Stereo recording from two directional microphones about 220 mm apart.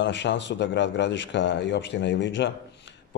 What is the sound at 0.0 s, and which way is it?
A man's voice, 55° left (ahead or behind).